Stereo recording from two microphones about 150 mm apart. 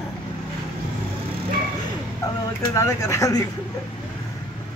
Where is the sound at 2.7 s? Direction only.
20° left (ahead or behind).